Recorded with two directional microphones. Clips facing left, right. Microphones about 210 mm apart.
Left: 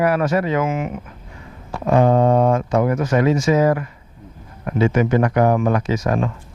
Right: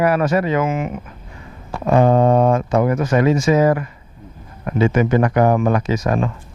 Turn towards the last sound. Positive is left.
turn(degrees=-20)  # may be behind; listen again after turning